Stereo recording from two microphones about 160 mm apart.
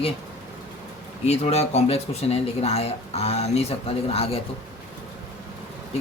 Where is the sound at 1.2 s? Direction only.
40° left (ahead or behind).